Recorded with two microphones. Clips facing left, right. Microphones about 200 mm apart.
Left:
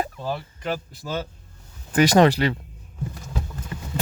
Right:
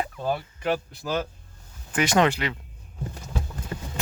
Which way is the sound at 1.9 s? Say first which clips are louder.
Left 5 dB; 35° left (ahead or behind).